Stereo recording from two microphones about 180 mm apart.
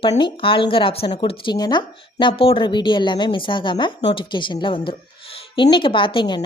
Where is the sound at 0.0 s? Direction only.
25° left (ahead or behind).